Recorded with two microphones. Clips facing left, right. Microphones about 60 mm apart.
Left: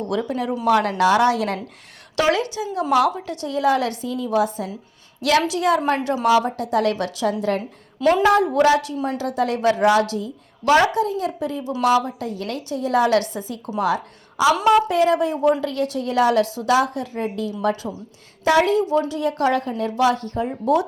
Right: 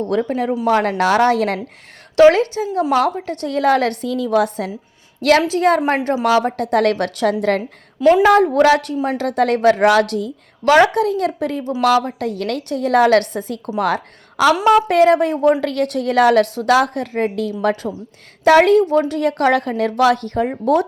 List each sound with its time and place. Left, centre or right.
0.1 s a woman's voice: right
3.4 s a woman's voice: right
4.1 s a woman's voice: right
5.5 s a woman's voice: right
8.2 s a woman's voice: right